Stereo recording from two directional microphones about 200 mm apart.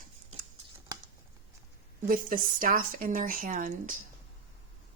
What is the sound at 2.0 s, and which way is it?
Speech, 45° right (ahead or behind).